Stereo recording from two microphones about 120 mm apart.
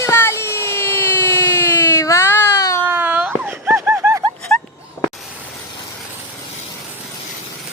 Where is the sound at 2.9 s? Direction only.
15° right (ahead or behind).